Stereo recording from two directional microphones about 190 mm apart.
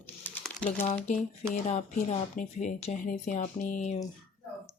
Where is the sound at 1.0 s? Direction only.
40° left (ahead or behind).